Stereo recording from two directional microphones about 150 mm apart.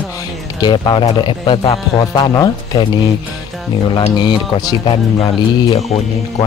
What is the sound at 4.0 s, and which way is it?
Speech, 30° left (ahead or behind).